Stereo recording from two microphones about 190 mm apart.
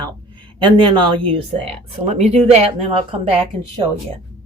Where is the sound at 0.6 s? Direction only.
25° right (ahead or behind).